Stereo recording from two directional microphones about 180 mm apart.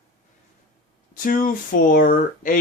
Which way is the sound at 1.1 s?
50° left (ahead or behind).